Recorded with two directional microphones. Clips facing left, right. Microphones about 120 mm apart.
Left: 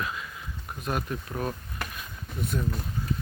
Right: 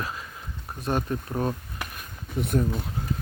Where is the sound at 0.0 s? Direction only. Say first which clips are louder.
Even; 35° right (ahead or behind).